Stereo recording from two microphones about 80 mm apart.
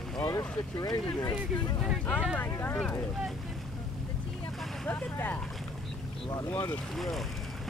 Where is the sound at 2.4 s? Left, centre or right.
Left.